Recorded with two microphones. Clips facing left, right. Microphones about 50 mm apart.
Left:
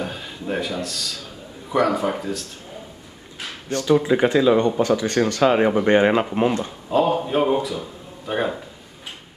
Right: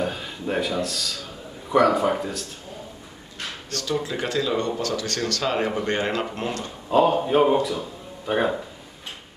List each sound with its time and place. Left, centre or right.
0.0 s speech: centre
3.6 s speech: left
6.9 s speech: centre